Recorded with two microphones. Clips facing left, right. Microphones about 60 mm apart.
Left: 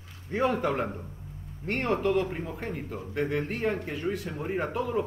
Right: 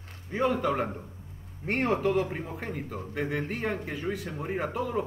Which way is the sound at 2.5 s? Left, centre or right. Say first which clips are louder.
Even; centre.